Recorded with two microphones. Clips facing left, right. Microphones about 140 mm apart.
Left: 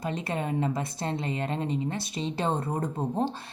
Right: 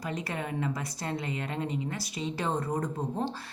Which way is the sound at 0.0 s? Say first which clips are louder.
Left 3 dB; 25° left (ahead or behind).